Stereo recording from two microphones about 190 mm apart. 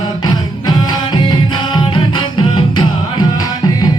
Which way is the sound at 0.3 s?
25° left (ahead or behind).